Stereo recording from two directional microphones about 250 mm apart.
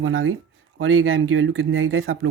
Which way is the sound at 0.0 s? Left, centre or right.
Right.